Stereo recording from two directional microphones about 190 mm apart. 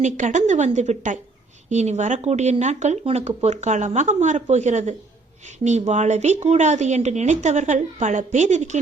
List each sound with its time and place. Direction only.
0.0 s speech: 40° right (ahead or behind)